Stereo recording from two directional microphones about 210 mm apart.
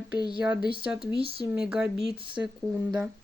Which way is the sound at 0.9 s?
5° right (ahead or behind).